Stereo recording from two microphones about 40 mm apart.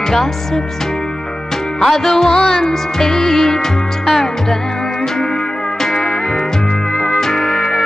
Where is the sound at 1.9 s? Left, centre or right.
Centre.